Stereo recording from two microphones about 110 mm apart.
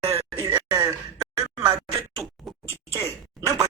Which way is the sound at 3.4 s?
30° right (ahead or behind).